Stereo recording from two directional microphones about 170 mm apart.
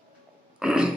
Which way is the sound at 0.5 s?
5° right (ahead or behind).